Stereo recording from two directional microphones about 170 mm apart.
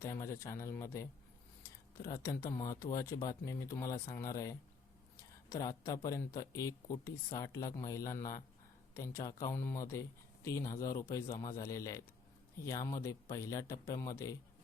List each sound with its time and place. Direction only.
0.0 s speech: 15° left (ahead or behind)
5.5 s speech: 20° left (ahead or behind)